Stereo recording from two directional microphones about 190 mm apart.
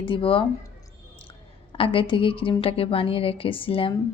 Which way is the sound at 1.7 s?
30° left (ahead or behind).